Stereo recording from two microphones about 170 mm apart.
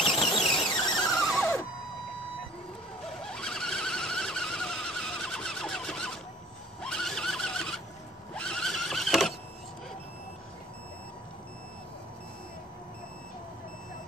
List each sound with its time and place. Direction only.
0.0 s squeal: centre (ahead or behind)
3.3 s a sound: 5° left (ahead or behind)
6.8 s neigh: 5° left (ahead or behind)
8.4 s horse: 5° left (ahead or behind)